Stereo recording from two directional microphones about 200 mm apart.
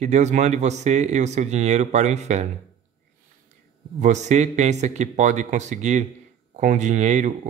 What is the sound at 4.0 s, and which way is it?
A man's voice, 35° right (ahead or behind).